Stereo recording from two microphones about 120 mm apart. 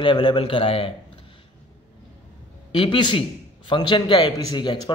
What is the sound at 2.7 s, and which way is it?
A man's voice, 45° left (ahead or behind).